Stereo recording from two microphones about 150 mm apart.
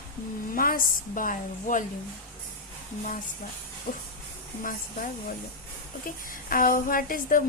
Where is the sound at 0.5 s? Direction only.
70° left (ahead or behind).